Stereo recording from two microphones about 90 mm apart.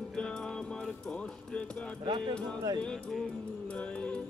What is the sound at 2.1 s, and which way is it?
Speech, 60° right (ahead or behind).